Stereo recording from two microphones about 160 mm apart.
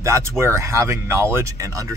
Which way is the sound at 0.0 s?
20° right (ahead or behind).